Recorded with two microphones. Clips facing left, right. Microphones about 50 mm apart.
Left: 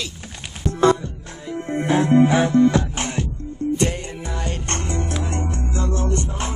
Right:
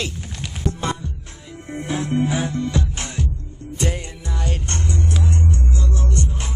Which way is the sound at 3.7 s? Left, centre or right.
Centre.